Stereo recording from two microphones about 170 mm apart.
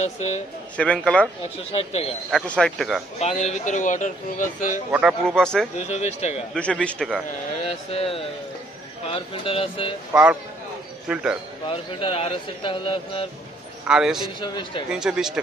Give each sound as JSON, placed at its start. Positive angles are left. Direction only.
{"t": 0.0, "sound": "a man's voice", "side_deg": 40}
{"t": 0.8, "sound": "a man's voice", "side_deg": 5}
{"t": 1.7, "sound": "a man's voice", "side_deg": 35}
{"t": 2.3, "sound": "speech", "side_deg": 0}
{"t": 3.2, "sound": "speech", "side_deg": 40}
{"t": 4.9, "sound": "speech", "side_deg": -5}
{"t": 5.9, "sound": "a man's voice", "side_deg": 40}
{"t": 6.5, "sound": "speech", "side_deg": 5}
{"t": 7.7, "sound": "a man's voice", "side_deg": 35}
{"t": 10.1, "sound": "speech", "side_deg": -10}
{"t": 11.7, "sound": "a man's voice", "side_deg": 30}
{"t": 13.8, "sound": "speech", "side_deg": -5}
{"t": 14.4, "sound": "speech", "side_deg": 25}
{"t": 14.9, "sound": "speech", "side_deg": -5}